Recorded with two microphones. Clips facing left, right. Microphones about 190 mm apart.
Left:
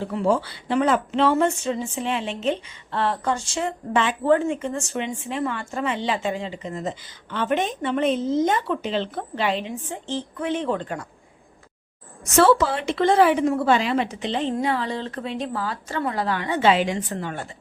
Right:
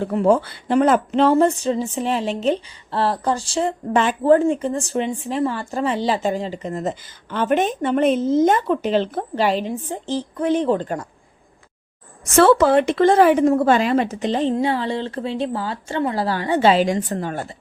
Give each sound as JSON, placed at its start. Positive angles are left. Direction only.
{"t": 0.0, "sound": "speech", "side_deg": -50}
{"t": 12.4, "sound": "speech", "side_deg": -55}